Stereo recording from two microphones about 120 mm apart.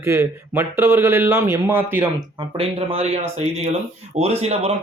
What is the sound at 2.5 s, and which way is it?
Speech, 50° right (ahead or behind).